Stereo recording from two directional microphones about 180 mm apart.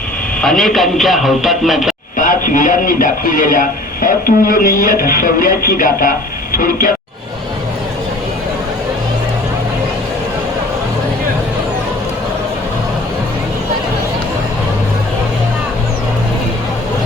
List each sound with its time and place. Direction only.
0.4 s a man's voice: centre (ahead or behind)
2.1 s speech: 45° left (ahead or behind)